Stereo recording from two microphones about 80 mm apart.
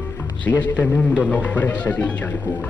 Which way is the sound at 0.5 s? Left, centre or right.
Left.